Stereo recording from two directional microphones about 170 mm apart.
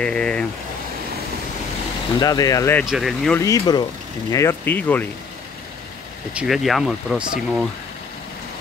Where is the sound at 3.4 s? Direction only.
20° left (ahead or behind).